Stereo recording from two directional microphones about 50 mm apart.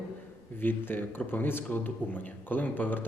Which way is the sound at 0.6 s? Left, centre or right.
Left.